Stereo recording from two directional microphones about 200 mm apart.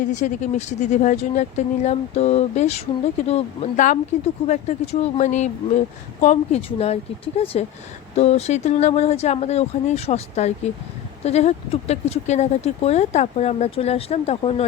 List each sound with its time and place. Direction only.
0.0 s speech: 40° left (ahead or behind)